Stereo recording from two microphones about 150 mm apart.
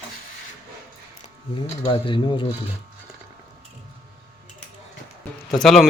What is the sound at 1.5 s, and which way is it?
Speech, 35° left (ahead or behind).